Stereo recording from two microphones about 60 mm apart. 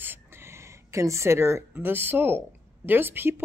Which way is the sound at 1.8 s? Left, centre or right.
Right.